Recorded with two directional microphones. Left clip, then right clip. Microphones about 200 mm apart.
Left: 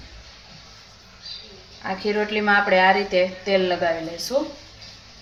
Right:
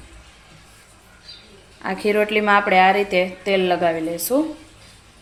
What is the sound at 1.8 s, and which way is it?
A woman's voice, 65° right (ahead or behind).